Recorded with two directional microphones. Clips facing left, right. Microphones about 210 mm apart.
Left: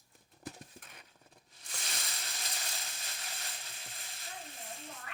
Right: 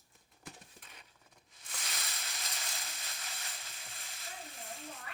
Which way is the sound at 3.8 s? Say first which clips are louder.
Left 1 dB; 30° left (ahead or behind).